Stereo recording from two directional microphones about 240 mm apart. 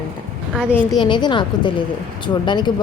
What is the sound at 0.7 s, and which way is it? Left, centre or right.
Speech, centre.